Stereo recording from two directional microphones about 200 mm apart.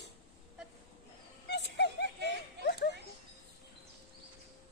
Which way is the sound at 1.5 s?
55° left (ahead or behind).